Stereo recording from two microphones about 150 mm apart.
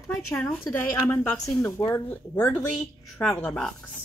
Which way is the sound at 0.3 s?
20° left (ahead or behind).